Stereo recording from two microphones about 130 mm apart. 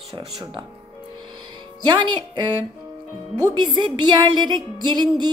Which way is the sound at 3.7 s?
35° right (ahead or behind).